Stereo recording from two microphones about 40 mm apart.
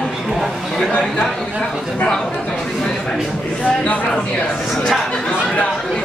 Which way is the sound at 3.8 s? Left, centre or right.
Left.